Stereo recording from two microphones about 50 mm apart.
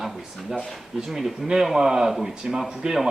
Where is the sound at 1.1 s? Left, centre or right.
Centre.